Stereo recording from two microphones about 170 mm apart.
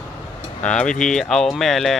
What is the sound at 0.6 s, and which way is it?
Speech, 5° left (ahead or behind).